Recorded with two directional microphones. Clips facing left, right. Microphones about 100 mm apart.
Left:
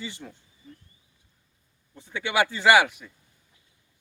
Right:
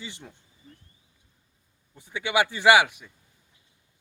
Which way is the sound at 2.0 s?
15° right (ahead or behind).